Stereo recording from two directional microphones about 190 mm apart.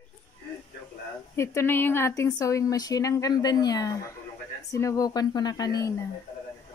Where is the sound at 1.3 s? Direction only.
15° left (ahead or behind).